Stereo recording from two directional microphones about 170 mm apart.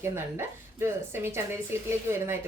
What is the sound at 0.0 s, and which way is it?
Speech, 15° right (ahead or behind).